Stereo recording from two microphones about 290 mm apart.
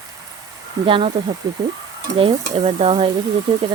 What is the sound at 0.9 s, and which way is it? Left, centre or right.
Speech, centre.